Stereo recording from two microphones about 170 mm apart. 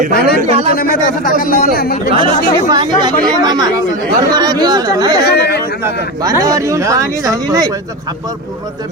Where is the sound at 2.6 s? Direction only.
25° right (ahead or behind).